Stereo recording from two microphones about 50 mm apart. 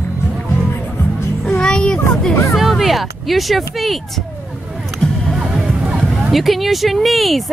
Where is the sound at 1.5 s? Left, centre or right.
Centre.